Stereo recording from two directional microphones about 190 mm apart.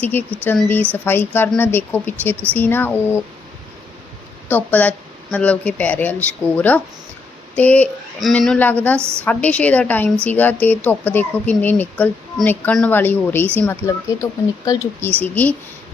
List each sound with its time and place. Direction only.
0.0 s speech: 10° left (ahead or behind)
4.4 s speech: 10° left (ahead or behind)
9.0 s a woman's voice: 15° right (ahead or behind)
9.2 s speech: 5° left (ahead or behind)